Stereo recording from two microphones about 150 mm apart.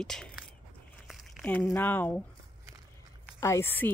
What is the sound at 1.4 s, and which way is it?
Speech, 15° left (ahead or behind).